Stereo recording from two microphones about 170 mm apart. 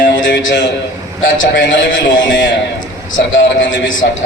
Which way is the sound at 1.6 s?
90° left.